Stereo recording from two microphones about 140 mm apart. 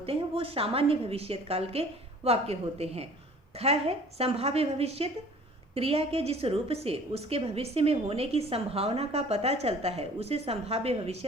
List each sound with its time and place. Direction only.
0.0 s a woman's voice: 45° right (ahead or behind)